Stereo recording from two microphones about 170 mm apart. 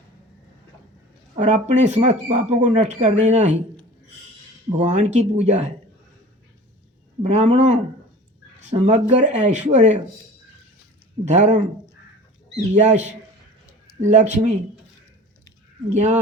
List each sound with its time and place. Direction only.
1.4 s speech: 45° right (ahead or behind)
4.8 s speech: 45° right (ahead or behind)
7.2 s speech: 40° right (ahead or behind)
11.3 s speech: 45° right (ahead or behind)
12.8 s speech: 45° right (ahead or behind)
15.9 s speech: 45° right (ahead or behind)